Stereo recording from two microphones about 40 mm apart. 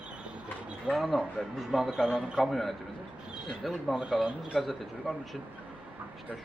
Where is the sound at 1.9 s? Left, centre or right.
Centre.